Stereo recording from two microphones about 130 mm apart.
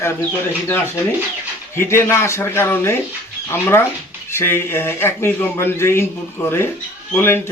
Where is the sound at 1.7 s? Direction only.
20° left (ahead or behind).